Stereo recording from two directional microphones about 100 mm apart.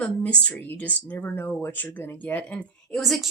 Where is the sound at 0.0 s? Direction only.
15° left (ahead or behind).